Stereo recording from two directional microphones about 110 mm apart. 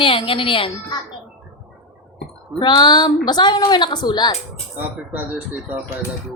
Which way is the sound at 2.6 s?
40° left (ahead or behind).